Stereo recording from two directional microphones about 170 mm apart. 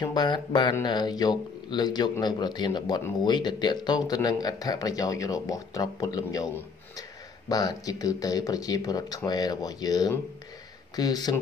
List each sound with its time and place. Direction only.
0.0 s a man's voice: 25° left (ahead or behind)